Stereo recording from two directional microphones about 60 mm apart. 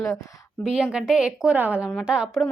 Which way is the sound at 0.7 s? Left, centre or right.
Centre.